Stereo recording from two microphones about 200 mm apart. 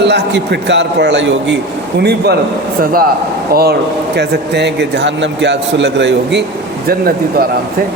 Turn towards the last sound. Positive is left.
turn(degrees=-50)  # may be behind; listen again after turning